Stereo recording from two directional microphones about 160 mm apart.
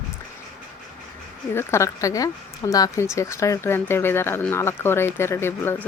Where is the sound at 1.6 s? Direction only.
15° left (ahead or behind).